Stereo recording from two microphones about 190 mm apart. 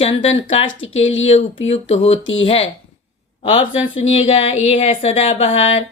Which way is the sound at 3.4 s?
30° left (ahead or behind).